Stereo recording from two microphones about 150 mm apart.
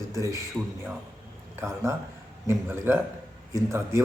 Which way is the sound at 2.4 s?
15° right (ahead or behind).